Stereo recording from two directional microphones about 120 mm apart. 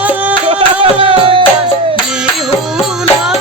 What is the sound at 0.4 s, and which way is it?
Music, 45° right (ahead or behind).